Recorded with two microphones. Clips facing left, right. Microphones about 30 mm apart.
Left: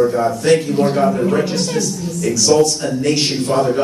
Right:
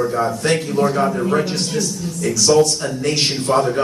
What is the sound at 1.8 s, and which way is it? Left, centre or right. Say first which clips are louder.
A man's voice: left 2 dB; centre.